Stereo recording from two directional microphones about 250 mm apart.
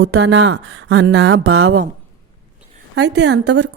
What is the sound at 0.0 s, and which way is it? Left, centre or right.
Speech, right.